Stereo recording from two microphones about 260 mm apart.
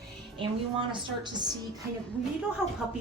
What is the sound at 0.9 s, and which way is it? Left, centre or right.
Speech, centre.